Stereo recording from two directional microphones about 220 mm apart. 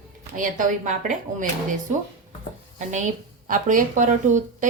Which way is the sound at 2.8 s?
35° right (ahead or behind).